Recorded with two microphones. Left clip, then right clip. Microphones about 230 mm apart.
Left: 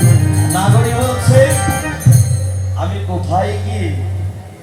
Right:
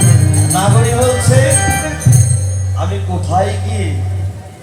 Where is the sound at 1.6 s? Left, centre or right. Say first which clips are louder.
Right 3 dB; right.